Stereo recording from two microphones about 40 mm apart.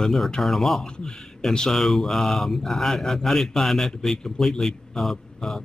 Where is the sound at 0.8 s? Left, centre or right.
Left.